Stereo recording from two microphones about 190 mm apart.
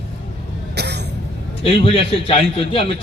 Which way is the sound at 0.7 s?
60° right (ahead or behind).